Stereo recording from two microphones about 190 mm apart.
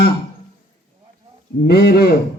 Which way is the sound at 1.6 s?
55° left (ahead or behind).